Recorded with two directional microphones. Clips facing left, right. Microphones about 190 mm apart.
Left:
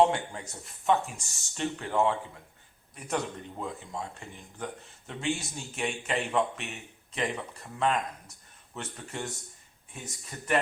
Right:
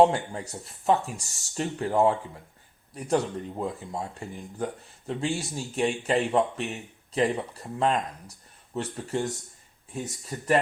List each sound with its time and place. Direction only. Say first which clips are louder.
0.1 s speech: right 3 dB; 35° right (ahead or behind)